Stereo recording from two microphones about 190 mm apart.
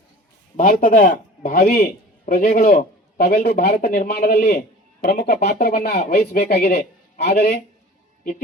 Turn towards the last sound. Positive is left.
turn(degrees=55)  # may be behind; listen again after turning